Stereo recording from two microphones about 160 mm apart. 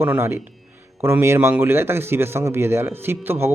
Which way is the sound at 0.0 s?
15° right (ahead or behind).